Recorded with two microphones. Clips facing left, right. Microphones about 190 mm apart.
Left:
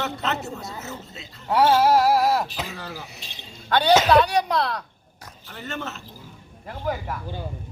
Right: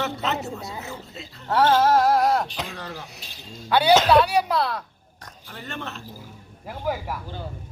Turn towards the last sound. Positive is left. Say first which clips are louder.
# even
turn(degrees=-5)  # may be behind; listen again after turning